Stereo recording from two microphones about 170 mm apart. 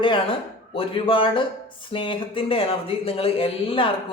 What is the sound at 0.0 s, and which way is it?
A man's voice, 30° left (ahead or behind).